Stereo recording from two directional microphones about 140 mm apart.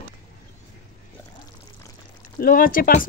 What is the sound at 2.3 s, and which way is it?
Speech, 90° left.